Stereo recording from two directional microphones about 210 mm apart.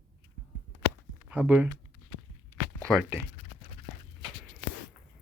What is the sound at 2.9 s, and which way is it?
Speech, centre (ahead or behind).